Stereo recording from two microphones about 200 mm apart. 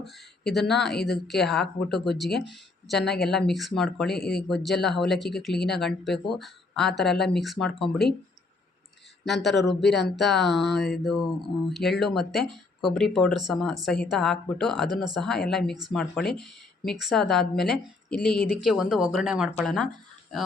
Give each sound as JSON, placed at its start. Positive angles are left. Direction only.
{"t": 0.5, "sound": "speech", "side_deg": 0}
{"t": 4.2, "sound": "a man's voice", "side_deg": 50}
{"t": 4.4, "sound": "speech", "side_deg": 0}
{"t": 9.2, "sound": "speech", "side_deg": 0}